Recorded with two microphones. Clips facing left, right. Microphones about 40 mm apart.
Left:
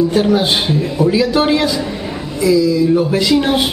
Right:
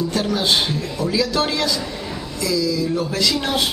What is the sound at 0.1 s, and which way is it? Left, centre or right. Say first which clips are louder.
A man's voice: left 6 dB; left.